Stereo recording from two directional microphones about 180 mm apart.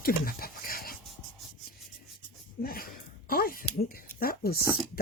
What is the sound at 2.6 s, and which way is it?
Speech, 55° left (ahead or behind).